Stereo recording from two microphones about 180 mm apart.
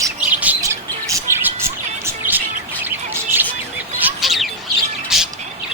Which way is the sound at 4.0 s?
Centre (ahead or behind).